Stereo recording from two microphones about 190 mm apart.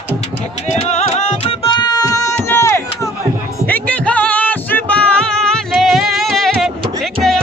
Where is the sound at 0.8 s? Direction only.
35° left (ahead or behind); by 6.7 s centre (ahead or behind).